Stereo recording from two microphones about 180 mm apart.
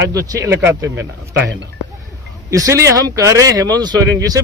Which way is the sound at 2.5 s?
15° right (ahead or behind).